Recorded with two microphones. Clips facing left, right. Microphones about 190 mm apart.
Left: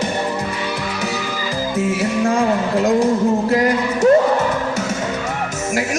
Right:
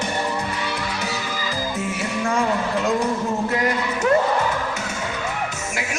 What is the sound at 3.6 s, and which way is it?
Speech, 35° left (ahead or behind).